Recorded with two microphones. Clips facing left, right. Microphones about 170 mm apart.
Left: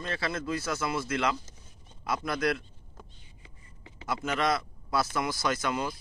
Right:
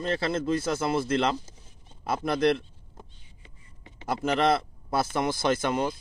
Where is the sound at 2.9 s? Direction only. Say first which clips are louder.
Right 2 dB; 20° right (ahead or behind).